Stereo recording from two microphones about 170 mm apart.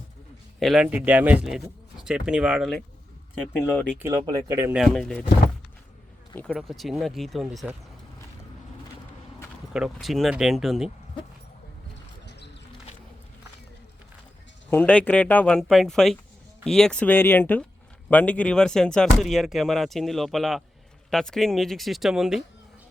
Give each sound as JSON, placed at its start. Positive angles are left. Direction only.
{"t": 0.6, "sound": "speech", "side_deg": 0}
{"t": 3.9, "sound": "speech", "side_deg": -20}
{"t": 4.7, "sound": "speech", "side_deg": 0}
{"t": 6.3, "sound": "speech", "side_deg": 5}
{"t": 9.7, "sound": "speech", "side_deg": 0}
{"t": 12.2, "sound": "music", "side_deg": 90}
{"t": 14.7, "sound": "speech", "side_deg": 10}